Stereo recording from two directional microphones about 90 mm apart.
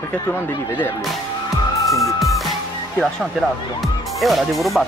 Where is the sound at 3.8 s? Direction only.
Centre (ahead or behind).